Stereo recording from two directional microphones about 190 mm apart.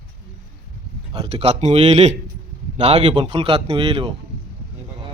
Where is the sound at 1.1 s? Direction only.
30° right (ahead or behind).